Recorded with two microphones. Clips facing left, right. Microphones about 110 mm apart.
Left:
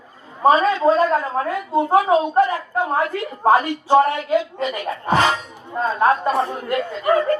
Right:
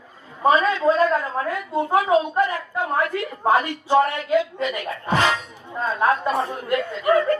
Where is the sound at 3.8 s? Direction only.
55° left (ahead or behind).